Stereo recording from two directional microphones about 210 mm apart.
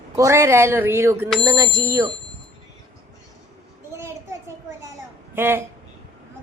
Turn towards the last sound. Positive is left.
turn(degrees=-10)  # may be behind; listen again after turning